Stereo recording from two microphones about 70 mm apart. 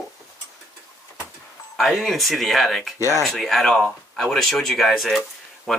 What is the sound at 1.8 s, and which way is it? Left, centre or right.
Speech, centre.